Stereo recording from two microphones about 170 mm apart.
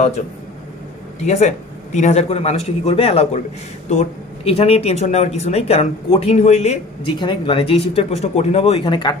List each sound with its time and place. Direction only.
1.2 s speech: 40° left (ahead or behind)
7.2 s speech: 30° left (ahead or behind)